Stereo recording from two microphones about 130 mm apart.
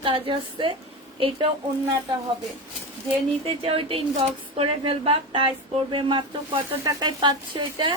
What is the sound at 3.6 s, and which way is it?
Speech, 45° right (ahead or behind).